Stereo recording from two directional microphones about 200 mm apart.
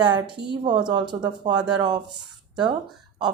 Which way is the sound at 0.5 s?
20° right (ahead or behind).